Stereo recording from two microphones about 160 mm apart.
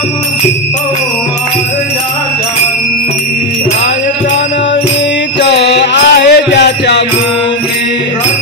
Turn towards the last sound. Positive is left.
turn(degrees=90)